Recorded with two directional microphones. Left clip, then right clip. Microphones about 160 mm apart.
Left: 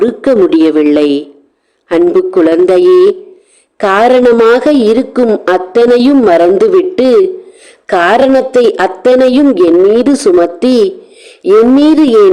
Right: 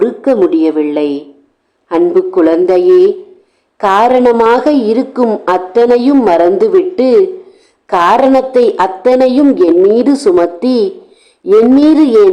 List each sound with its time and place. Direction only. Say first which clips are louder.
0.0 s a man's voice: left 2 dB; 35° left (ahead or behind)